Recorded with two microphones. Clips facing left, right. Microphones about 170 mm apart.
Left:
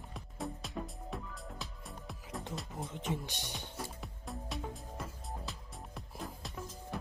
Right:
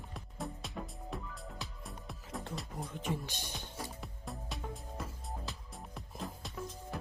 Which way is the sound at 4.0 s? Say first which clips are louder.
Left 1 dB; centre (ahead or behind).